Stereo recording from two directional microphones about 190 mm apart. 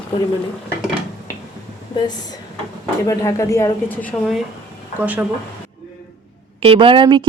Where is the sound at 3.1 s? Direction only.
15° left (ahead or behind).